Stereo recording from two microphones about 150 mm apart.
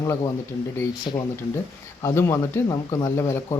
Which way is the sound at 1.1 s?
30° left (ahead or behind).